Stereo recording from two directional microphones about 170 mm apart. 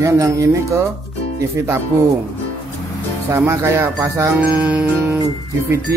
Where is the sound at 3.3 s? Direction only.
15° right (ahead or behind).